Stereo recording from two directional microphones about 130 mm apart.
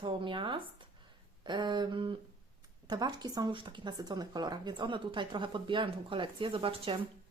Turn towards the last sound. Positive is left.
turn(degrees=-45)  # may be behind; listen again after turning